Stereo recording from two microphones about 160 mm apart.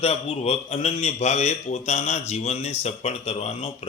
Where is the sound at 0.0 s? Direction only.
40° left (ahead or behind).